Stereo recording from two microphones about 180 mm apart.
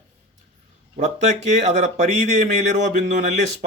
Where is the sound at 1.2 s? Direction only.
40° right (ahead or behind).